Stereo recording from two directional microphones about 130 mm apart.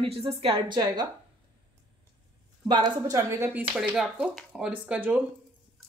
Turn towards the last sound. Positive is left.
turn(degrees=-10)  # may be behind; listen again after turning